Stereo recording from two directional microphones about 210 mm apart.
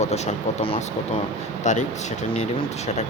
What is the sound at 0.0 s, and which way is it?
Speech, 30° left (ahead or behind).